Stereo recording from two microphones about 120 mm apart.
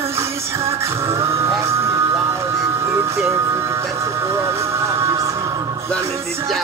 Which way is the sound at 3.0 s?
20° right (ahead or behind).